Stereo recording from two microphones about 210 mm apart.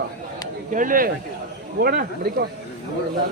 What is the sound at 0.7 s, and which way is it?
A man's voice, 40° right (ahead or behind).